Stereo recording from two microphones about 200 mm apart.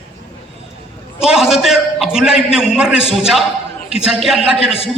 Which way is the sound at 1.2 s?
5° right (ahead or behind).